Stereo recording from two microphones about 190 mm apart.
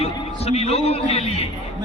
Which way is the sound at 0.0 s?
30° left (ahead or behind).